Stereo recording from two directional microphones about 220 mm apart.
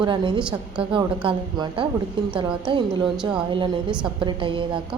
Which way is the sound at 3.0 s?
5° right (ahead or behind).